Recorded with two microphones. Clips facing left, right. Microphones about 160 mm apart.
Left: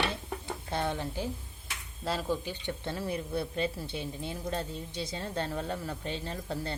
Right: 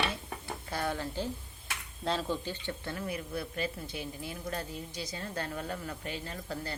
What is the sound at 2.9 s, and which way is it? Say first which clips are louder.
A man's voice: left 4 dB; 30° left (ahead or behind).